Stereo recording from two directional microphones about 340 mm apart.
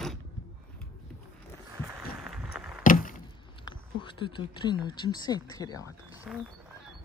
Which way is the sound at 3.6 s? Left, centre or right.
Centre.